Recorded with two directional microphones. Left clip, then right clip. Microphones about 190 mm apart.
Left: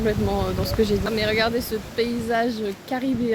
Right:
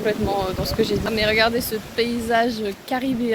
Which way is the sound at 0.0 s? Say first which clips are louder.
Right 2 dB; 10° left (ahead or behind).